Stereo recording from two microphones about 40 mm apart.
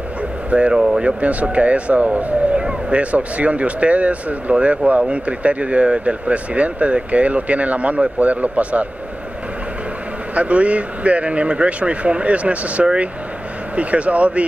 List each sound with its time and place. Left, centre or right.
0.5 s speech: right
1.2 s speech: right
10.3 s speech: right